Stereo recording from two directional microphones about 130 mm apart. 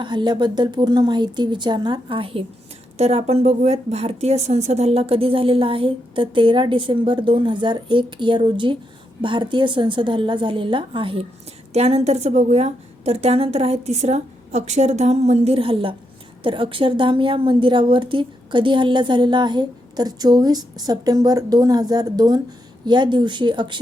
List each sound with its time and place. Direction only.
0.0 s a woman's voice: 35° right (ahead or behind)
3.0 s a woman's voice: 55° right (ahead or behind)
11.7 s a woman's voice: 55° right (ahead or behind); by 23.8 s 35° right (ahead or behind)